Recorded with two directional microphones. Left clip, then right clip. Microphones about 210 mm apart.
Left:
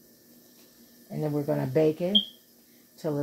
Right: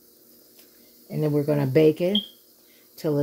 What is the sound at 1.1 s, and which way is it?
Speech, 45° right (ahead or behind).